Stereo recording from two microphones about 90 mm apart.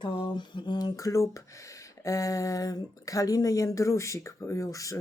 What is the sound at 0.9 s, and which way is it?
Speech, 35° left (ahead or behind).